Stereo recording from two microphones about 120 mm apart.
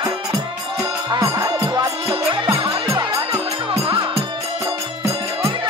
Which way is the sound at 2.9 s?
25° right (ahead or behind).